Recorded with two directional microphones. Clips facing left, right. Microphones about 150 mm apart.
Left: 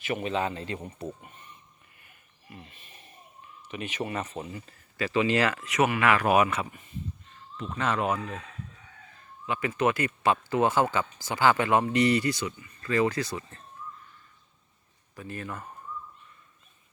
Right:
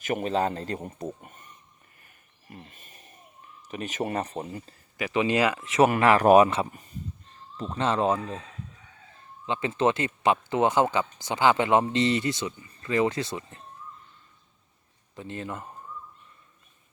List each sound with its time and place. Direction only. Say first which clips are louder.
0.0 s a man's voice: right 3 dB; 45° right (ahead or behind)
1.2 s a sound: right 1 dB; 45° right (ahead or behind)
2.0 s snoring: left 1 dB; 40° right (ahead or behind)
3.7 s speech: right 3 dB; 40° right (ahead or behind)
4.9 s speech: right 1 dB; 20° right (ahead or behind)
5.9 s speech: right 6 dB; 35° right (ahead or behind)
9.5 s speech: right 2 dB; 25° right (ahead or behind)
15.1 s speech: right 2 dB; 20° right (ahead or behind)